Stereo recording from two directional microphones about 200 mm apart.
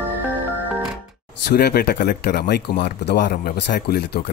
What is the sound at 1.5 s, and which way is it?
Speech, 50° left (ahead or behind).